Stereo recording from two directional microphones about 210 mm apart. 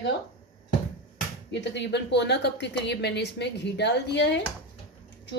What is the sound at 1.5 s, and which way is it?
A woman's voice, 55° left (ahead or behind).